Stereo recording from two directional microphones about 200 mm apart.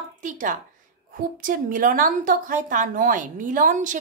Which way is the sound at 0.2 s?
40° right (ahead or behind).